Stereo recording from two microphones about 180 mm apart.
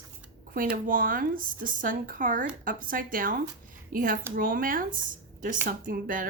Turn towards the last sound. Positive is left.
turn(degrees=-50)  # may be behind; listen again after turning